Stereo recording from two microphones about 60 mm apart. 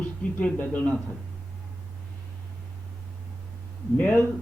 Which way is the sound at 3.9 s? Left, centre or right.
Left.